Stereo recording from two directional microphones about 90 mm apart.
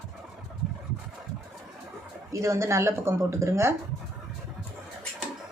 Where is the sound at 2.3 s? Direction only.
35° right (ahead or behind).